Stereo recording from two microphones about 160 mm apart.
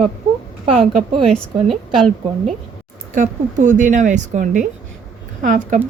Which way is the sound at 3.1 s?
50° right (ahead or behind).